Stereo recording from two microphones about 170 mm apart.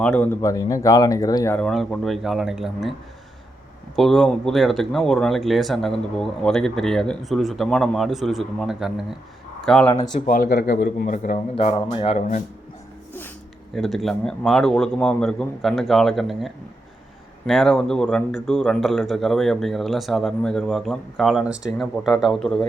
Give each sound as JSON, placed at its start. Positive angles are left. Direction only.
{"t": 0.0, "sound": "speech", "side_deg": 10}
{"t": 1.5, "sound": "speech", "side_deg": 5}
{"t": 3.9, "sound": "speech", "side_deg": 0}
{"t": 10.2, "sound": "speech", "side_deg": 55}
{"t": 11.5, "sound": "speech", "side_deg": 35}
{"t": 13.7, "sound": "speech", "side_deg": 0}